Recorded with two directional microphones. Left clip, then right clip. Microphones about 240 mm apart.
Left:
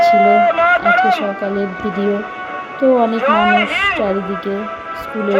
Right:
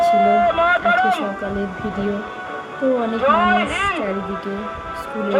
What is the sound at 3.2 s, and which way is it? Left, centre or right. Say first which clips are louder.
Speech: left 3 dB; right.